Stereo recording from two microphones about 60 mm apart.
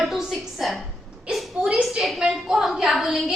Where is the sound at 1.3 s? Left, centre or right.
Centre.